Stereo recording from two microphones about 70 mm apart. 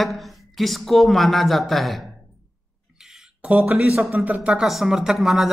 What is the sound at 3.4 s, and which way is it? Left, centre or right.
Speech, centre.